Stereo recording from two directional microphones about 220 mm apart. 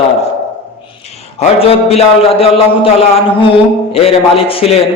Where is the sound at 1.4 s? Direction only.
25° left (ahead or behind).